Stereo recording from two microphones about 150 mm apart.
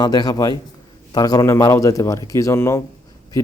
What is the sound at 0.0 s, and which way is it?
A man's voice, 25° left (ahead or behind).